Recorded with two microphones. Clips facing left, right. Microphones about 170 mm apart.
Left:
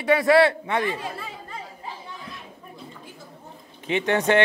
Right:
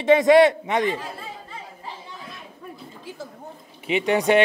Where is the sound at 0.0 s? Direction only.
20° right (ahead or behind).